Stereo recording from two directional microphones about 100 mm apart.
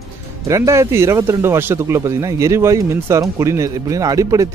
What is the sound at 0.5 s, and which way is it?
Speech, 30° right (ahead or behind).